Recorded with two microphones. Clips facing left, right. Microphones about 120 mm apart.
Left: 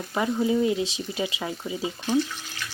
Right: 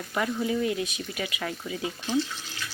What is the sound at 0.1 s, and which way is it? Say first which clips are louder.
Speech: left 4 dB; 25° left (ahead or behind).